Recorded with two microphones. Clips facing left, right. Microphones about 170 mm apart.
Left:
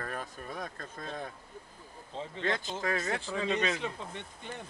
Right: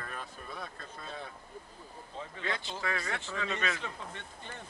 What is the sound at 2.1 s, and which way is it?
Speech, 25° left (ahead or behind).